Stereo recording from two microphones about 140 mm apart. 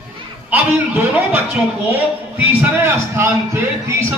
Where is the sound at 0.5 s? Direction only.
15° right (ahead or behind).